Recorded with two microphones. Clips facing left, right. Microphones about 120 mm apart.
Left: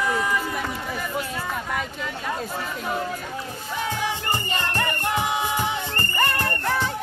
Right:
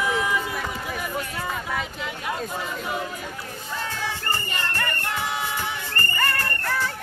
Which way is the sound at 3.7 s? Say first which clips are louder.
Left 4 dB; 15° left (ahead or behind).